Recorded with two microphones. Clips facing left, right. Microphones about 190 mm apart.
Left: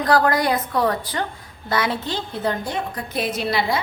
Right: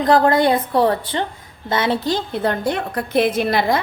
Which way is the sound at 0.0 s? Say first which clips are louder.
Right 4 dB; 20° right (ahead or behind).